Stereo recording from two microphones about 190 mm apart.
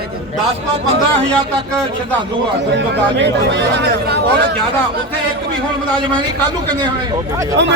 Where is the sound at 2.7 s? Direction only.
65° right (ahead or behind).